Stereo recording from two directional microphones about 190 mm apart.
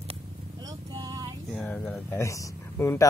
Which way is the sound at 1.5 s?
5° left (ahead or behind).